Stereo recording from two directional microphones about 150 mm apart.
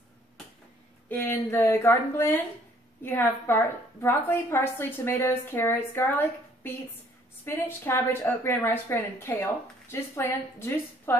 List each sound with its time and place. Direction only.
1.0 s a woman's voice: 15° left (ahead or behind)